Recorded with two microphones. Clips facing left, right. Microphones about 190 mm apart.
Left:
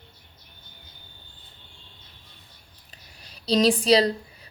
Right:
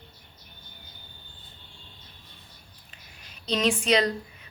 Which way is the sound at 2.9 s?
35° left (ahead or behind).